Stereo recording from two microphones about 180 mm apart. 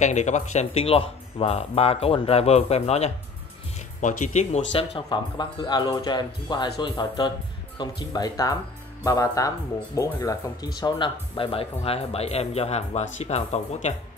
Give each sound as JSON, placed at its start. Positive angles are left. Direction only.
{"t": 0.0, "sound": "speech", "side_deg": 40}